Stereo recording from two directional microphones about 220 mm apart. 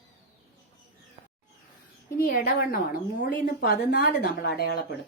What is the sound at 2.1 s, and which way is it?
A woman's voice, 45° left (ahead or behind).